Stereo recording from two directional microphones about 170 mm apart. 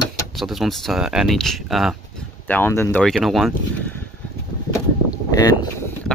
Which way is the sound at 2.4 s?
10° left (ahead or behind).